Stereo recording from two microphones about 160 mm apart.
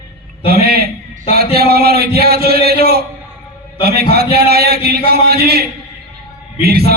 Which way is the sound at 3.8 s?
80° right.